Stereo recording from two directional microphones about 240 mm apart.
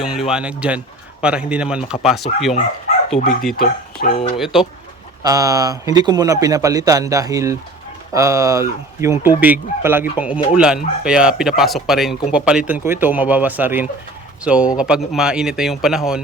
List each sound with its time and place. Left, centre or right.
0.0 s speech: centre
3.6 s speech: left
4.4 s speech: centre
5.2 s a man's voice: centre